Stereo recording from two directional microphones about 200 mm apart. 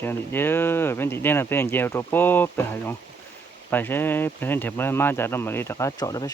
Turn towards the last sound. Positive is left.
turn(degrees=15)  # may be behind; listen again after turning